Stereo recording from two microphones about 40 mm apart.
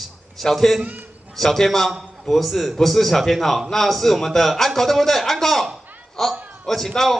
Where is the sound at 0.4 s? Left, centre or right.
Centre.